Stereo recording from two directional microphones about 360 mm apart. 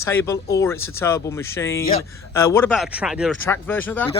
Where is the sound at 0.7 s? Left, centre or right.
Left.